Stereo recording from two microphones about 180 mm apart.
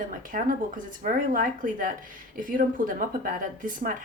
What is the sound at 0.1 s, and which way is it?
Speech, 50° right (ahead or behind).